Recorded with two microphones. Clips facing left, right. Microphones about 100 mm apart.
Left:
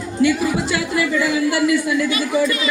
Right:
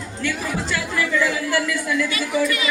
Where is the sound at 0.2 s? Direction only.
15° left (ahead or behind).